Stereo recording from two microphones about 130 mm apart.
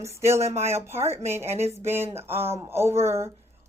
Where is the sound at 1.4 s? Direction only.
55° right (ahead or behind).